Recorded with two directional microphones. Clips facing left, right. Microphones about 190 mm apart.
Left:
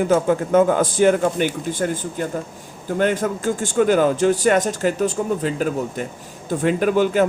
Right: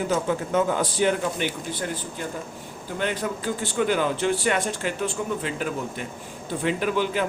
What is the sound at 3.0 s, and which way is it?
Speech, 45° left (ahead or behind).